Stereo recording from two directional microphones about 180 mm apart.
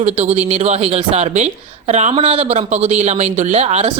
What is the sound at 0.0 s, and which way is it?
Speech, 35° right (ahead or behind).